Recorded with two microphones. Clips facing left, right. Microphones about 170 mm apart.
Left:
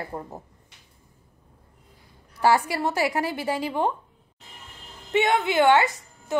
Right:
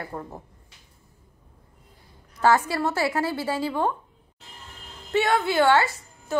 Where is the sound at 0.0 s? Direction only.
15° left (ahead or behind).